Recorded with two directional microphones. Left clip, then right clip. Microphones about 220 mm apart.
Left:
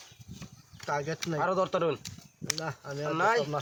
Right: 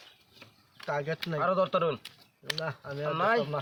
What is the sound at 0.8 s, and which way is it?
Speech, 20° left (ahead or behind).